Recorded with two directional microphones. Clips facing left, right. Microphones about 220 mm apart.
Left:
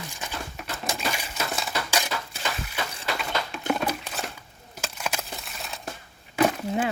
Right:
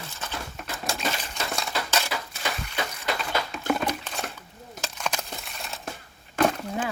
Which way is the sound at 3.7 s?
5° left (ahead or behind).